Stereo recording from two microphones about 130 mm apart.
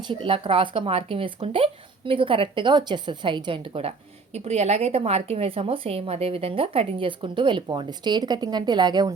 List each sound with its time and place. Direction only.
0.1 s speech: 45° right (ahead or behind)